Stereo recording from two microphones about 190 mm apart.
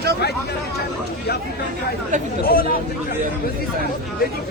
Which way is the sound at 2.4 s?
50° left (ahead or behind).